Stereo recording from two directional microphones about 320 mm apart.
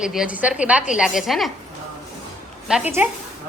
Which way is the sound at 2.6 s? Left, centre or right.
Centre.